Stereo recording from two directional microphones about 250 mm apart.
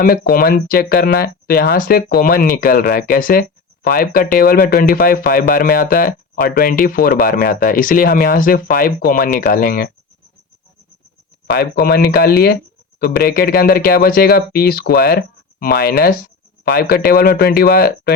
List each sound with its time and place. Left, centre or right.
0.0 s speech: left
11.5 s speech: left